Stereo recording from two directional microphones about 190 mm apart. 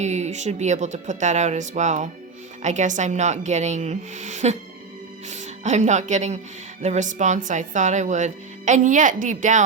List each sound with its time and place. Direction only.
0.0 s speech: 35° right (ahead or behind)